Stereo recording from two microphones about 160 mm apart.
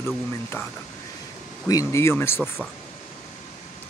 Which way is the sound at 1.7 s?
20° left (ahead or behind).